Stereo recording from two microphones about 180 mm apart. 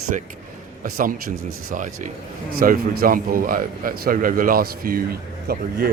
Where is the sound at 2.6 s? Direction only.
50° right (ahead or behind).